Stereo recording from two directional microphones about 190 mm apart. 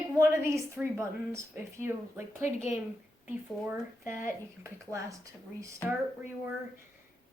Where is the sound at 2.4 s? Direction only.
35° left (ahead or behind).